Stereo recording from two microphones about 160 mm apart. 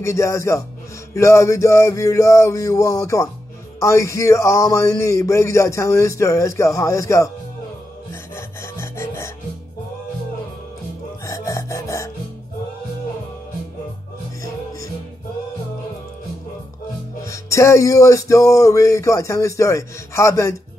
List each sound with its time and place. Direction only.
0.0 s speech: 20° left (ahead or behind)
8.1 s rub: 15° left (ahead or behind)
11.2 s music: 20° left (ahead or behind)
17.3 s speech: 20° left (ahead or behind)